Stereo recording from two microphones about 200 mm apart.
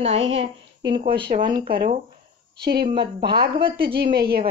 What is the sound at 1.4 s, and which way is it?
Speech, 20° right (ahead or behind).